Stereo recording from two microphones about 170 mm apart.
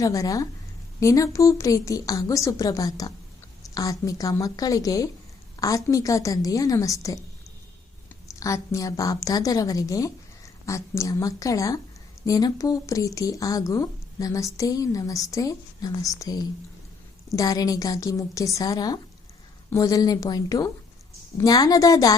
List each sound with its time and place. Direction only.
0.0 s speech: 20° left (ahead or behind)
8.4 s speech: 20° left (ahead or behind)